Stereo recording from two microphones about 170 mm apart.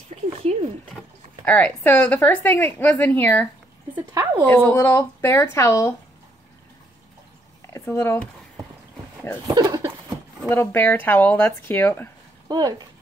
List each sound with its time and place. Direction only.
0.1 s a sound: 40° right (ahead or behind)
1.4 s speech: 10° left (ahead or behind)
4.1 s speech: 20° right (ahead or behind)
4.5 s speech: 10° left (ahead or behind)
7.7 s speech: 15° left (ahead or behind)
9.5 s a sound: 20° right (ahead or behind)
10.5 s speech: 15° left (ahead or behind)
12.4 s speech: 25° right (ahead or behind)